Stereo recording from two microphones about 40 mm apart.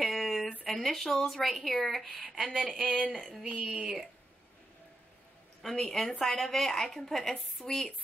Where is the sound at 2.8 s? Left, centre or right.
Right.